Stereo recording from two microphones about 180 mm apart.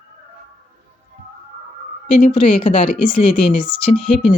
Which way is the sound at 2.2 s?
30° left (ahead or behind).